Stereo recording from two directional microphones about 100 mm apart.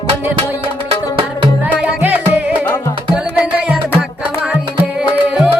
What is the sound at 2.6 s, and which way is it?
Music, 25° left (ahead or behind).